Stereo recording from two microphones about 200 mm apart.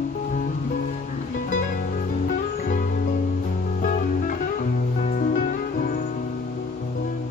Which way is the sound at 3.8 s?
40° left (ahead or behind).